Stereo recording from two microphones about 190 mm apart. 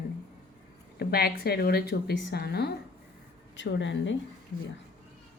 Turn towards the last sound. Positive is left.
turn(degrees=75)  # may be behind; listen again after turning